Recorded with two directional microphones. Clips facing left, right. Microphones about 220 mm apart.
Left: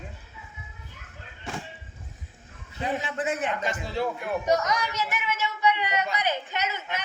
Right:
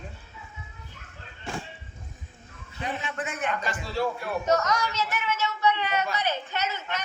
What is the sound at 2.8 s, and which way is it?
Speech, 35° left (ahead or behind).